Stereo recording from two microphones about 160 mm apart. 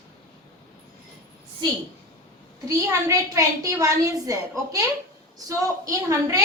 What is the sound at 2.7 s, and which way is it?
A woman's voice, 20° right (ahead or behind).